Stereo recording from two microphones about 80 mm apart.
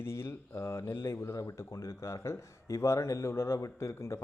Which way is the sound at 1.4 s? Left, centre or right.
Left.